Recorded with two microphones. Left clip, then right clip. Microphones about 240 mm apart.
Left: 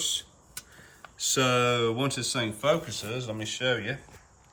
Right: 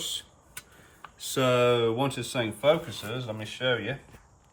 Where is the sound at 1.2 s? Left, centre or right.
Centre.